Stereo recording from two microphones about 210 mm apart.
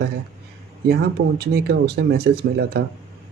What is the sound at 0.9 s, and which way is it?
Speech, 50° right (ahead or behind).